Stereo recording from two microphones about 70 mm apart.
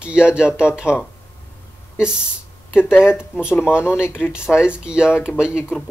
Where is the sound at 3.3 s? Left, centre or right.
Centre.